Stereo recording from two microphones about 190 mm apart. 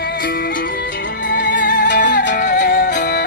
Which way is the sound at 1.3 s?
45° left (ahead or behind).